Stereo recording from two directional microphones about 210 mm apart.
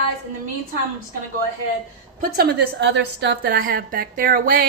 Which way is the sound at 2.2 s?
50° right (ahead or behind).